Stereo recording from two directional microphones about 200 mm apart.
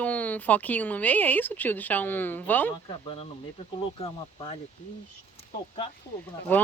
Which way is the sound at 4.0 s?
30° left (ahead or behind).